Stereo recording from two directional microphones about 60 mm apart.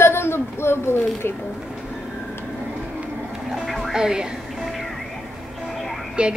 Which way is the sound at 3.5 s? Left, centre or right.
Centre.